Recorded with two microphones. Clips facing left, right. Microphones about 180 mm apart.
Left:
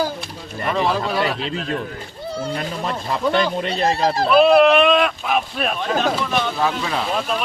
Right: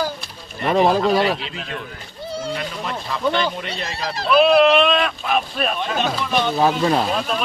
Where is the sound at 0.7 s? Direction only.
45° right (ahead or behind).